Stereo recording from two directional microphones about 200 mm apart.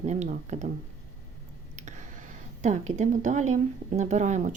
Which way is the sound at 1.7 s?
40° right (ahead or behind).